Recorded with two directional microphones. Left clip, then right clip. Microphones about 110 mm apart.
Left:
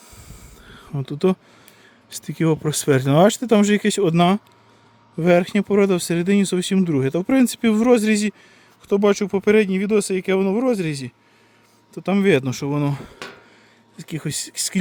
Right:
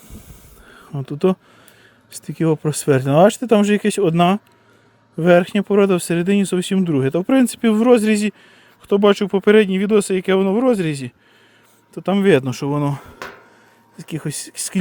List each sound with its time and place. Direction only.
0.1 s a sound: 30° left (ahead or behind)
1.1 s speech: 15° left (ahead or behind)
5.1 s speech: 5° left (ahead or behind)
12.2 s speech: 5° left (ahead or behind)
12.7 s speech: 15° left (ahead or behind)